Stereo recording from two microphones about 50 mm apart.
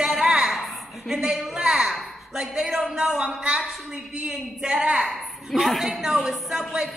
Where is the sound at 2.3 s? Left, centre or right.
Centre.